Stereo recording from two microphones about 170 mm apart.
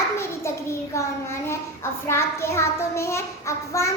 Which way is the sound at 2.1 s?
15° left (ahead or behind).